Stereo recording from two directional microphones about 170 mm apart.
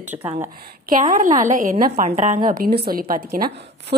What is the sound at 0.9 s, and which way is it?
A woman's voice, 50° right (ahead or behind).